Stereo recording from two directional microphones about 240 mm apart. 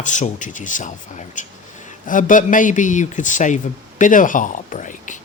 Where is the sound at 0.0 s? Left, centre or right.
Left.